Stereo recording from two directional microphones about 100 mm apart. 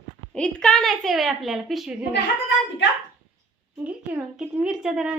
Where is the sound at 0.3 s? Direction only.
10° left (ahead or behind).